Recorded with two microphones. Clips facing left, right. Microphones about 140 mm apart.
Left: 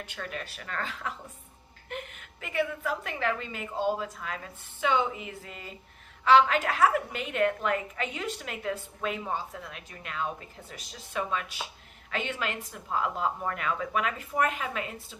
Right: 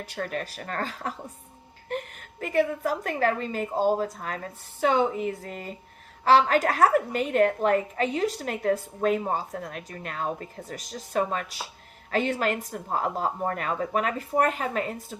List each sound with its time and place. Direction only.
0.0 s a woman's voice: 40° right (ahead or behind)